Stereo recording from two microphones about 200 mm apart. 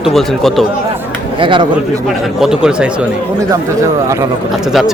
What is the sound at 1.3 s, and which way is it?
Speech, 25° right (ahead or behind).